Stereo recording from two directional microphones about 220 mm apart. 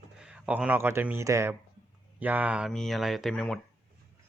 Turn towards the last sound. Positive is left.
turn(degrees=5)  # may be behind; listen again after turning